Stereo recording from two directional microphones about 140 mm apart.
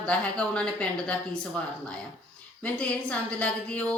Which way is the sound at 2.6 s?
10° left (ahead or behind).